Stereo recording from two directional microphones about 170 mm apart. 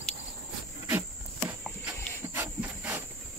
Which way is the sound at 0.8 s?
15° right (ahead or behind).